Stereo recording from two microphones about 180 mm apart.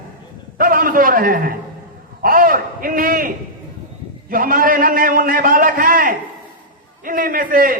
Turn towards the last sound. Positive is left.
turn(degrees=-50)  # may be behind; listen again after turning